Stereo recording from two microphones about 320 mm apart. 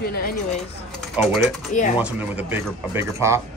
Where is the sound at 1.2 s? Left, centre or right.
Centre.